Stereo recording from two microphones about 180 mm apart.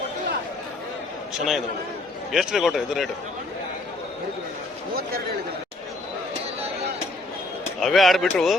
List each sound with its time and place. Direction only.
1.3 s speech: centre (ahead or behind)
7.8 s speech: centre (ahead or behind)